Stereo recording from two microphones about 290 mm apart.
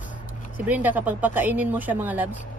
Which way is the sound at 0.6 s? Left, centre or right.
Centre.